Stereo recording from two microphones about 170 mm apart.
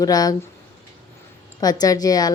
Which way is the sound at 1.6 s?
20° left (ahead or behind).